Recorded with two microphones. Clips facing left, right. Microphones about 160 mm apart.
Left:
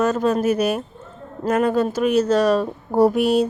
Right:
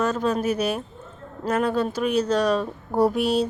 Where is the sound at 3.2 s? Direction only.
10° left (ahead or behind).